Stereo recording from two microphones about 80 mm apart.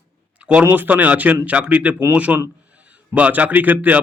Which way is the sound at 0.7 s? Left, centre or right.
Right.